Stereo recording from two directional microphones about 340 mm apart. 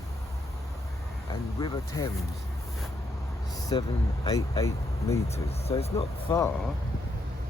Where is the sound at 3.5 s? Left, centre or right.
Centre.